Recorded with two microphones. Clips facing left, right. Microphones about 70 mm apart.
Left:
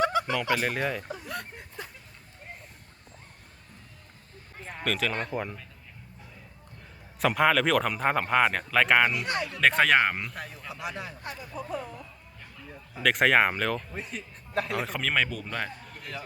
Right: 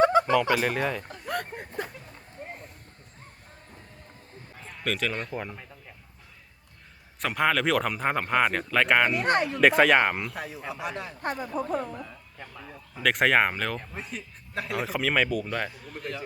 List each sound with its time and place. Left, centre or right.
0.0 s fowl: right
0.5 s speech: centre
1.2 s a sound: right
4.8 s speech: centre
7.2 s speech: centre
9.1 s speech: right
9.6 s speech: centre
11.2 s speech: right
12.9 s speech: centre